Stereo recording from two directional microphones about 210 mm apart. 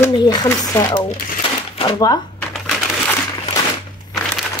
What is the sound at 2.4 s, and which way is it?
Shuffling cards, centre (ahead or behind).